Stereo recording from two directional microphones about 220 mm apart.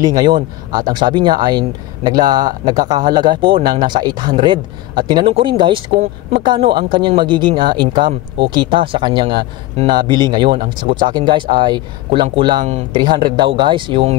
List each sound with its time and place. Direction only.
0.0 s speech: 20° right (ahead or behind)